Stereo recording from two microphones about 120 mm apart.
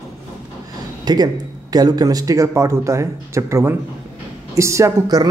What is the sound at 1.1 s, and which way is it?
Speech, 35° right (ahead or behind).